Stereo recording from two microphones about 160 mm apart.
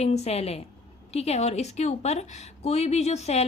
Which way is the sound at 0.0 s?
40° left (ahead or behind).